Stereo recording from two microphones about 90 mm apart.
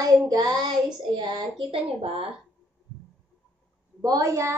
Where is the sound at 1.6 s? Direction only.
90° right.